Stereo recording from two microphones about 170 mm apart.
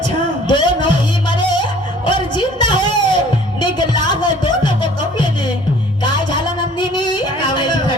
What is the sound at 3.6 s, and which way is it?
Music, 25° left (ahead or behind).